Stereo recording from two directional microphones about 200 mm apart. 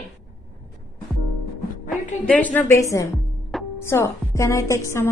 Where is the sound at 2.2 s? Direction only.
5° left (ahead or behind).